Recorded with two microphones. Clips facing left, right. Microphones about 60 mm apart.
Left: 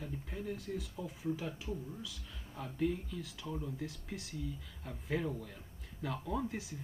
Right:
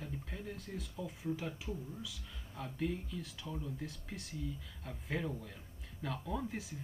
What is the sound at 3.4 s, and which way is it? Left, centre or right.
Speech, left.